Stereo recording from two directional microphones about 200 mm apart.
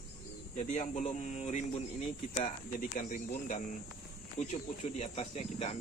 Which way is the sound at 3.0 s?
40° left (ahead or behind).